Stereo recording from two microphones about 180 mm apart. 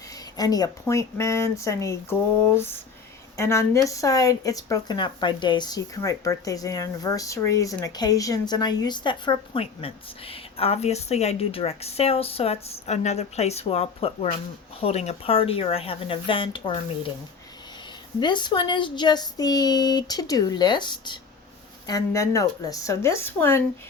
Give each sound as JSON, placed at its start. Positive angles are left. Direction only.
{"t": 0.3, "sound": "a woman's voice", "side_deg": 20}
{"t": 3.3, "sound": "speech", "side_deg": 15}
{"t": 18.2, "sound": "a woman's voice", "side_deg": 25}